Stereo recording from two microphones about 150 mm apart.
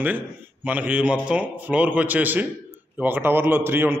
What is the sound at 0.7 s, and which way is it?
A man's voice, 10° right (ahead or behind).